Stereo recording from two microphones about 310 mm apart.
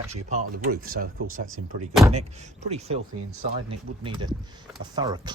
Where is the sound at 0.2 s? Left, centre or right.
Right.